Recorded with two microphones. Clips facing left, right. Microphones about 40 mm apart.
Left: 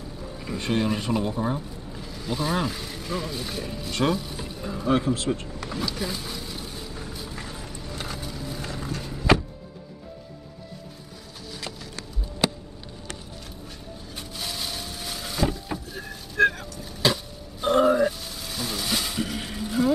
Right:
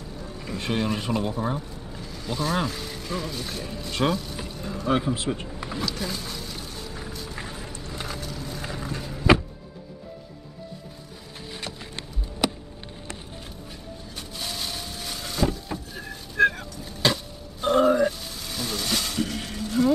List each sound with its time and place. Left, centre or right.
0.4 s speech: centre
4.5 s a sound: centre
4.8 s speech: centre
5.1 s speech: centre
5.5 s speech: centre
5.9 s a sound: centre
7.3 s vehicle: centre
7.7 s vehicle: centre
8.6 s a sound: centre
14.1 s boat: centre